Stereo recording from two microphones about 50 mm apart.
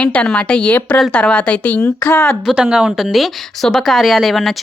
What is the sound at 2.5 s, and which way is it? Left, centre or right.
Speech, centre.